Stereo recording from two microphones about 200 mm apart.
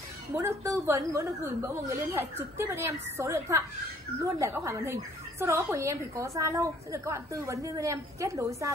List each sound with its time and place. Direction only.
0.4 s a woman's voice: 15° right (ahead or behind)